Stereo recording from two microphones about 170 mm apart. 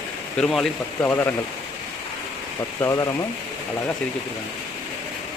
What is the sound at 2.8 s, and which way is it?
Speech, 20° left (ahead or behind).